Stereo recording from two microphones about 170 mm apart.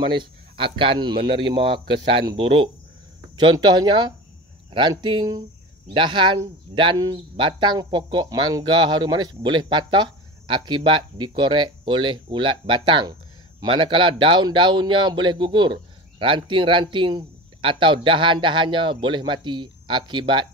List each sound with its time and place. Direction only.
0.1 s speech: 30° right (ahead or behind)